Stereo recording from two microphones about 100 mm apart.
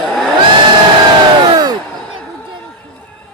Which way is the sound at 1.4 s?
45° right (ahead or behind).